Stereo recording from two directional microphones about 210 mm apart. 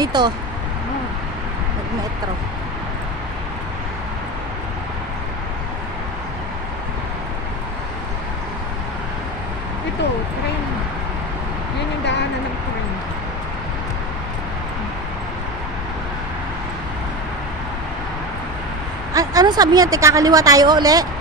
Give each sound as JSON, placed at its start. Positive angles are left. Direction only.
{"t": 0.0, "sound": "speech", "side_deg": -20}
{"t": 12.0, "sound": "a sound", "side_deg": 55}
{"t": 19.1, "sound": "speech", "side_deg": -20}